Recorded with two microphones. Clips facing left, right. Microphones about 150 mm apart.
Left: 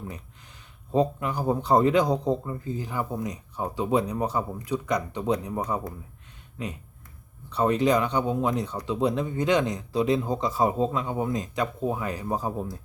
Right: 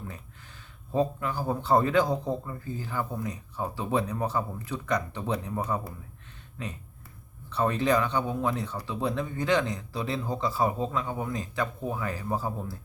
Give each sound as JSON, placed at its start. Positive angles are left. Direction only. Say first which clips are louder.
{"t": 0.9, "sound": "a man's voice", "louder": "left 3 dB", "side_deg": 20}